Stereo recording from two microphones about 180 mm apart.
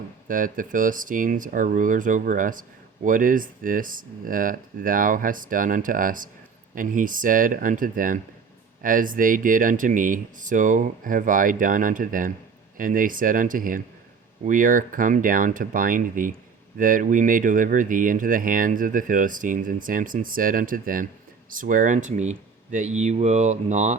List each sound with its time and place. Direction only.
0.3 s speech: 50° right (ahead or behind)